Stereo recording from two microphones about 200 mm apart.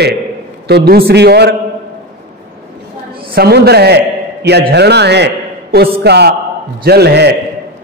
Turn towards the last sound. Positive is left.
turn(degrees=-55)  # may be behind; listen again after turning